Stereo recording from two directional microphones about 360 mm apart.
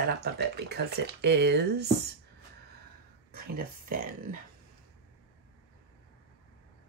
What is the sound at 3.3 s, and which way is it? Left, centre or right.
Speech, right.